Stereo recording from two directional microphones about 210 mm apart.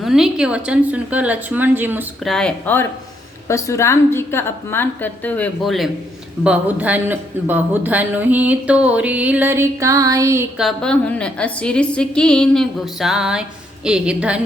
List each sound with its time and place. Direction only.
0.0 s speech: centre (ahead or behind)
2.3 s a woman's voice: 5° left (ahead or behind); by 10.4 s 15° right (ahead or behind)
10.6 s a woman's voice: centre (ahead or behind)